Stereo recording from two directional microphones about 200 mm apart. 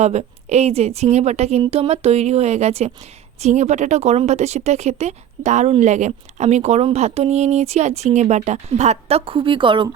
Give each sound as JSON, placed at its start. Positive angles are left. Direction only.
{"t": 0.0, "sound": "speech", "side_deg": -35}